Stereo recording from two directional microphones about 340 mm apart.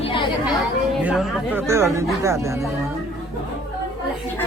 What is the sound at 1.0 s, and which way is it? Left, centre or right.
Speech, centre.